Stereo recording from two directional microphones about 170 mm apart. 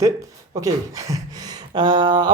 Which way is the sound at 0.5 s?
20° right (ahead or behind).